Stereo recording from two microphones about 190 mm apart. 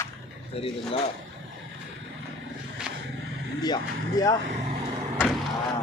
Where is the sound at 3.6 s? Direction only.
20° left (ahead or behind).